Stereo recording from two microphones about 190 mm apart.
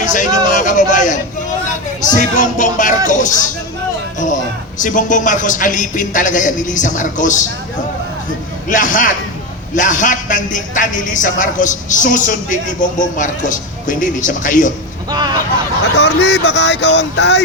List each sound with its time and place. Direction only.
0.0 s a man's voice: 40° left (ahead or behind)
4.8 s a man's voice: 45° left (ahead or behind)
8.7 s a man's voice: 45° left (ahead or behind)
15.1 s speech: 20° right (ahead or behind)
16.0 s a sound: 65° left (ahead or behind)